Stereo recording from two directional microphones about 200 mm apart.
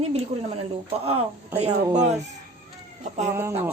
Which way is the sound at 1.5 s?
35° right (ahead or behind).